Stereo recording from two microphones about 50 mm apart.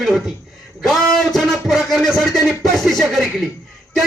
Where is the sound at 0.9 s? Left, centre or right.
Centre.